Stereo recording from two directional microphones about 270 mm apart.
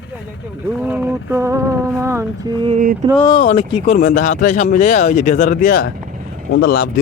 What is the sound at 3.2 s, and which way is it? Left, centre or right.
Speech, centre.